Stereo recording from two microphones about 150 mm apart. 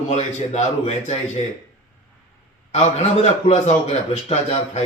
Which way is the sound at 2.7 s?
45° left (ahead or behind).